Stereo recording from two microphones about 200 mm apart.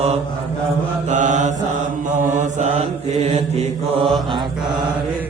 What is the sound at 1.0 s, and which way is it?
Mantra, 40° right (ahead or behind).